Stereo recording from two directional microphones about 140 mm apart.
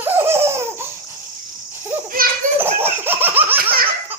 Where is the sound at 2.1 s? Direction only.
90° right.